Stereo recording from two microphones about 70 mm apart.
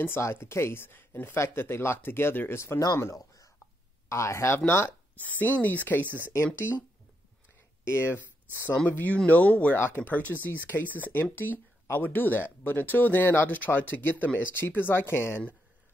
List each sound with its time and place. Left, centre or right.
0.2 s speech: left
3.2 s a sound: left
4.1 s speech: left
5.4 s speech: left
6.0 s speech: right
6.4 s speech: left
7.8 s speech: left
9.8 s speech: left